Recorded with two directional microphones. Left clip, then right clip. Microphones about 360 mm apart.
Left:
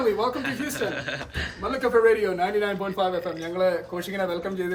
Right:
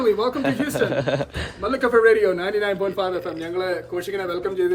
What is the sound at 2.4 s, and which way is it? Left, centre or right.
Speech, centre.